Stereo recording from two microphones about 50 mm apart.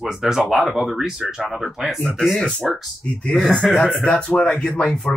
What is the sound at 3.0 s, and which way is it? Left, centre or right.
Speech, left.